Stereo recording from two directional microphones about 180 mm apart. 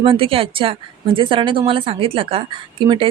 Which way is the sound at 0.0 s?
30° right (ahead or behind).